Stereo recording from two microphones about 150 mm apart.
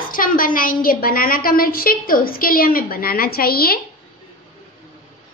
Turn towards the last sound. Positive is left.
turn(degrees=90)